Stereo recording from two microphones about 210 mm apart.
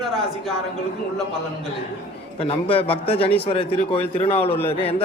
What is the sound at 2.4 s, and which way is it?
Speech, 25° left (ahead or behind).